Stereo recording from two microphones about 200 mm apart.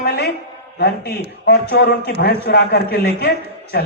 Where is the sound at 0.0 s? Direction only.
55° left (ahead or behind).